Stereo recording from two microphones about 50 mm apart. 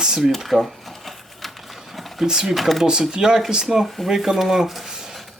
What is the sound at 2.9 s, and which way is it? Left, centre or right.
Speech, centre.